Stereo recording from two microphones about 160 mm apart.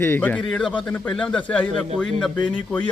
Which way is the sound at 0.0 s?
10° left (ahead or behind).